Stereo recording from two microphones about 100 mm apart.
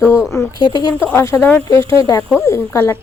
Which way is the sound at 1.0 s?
25° left (ahead or behind).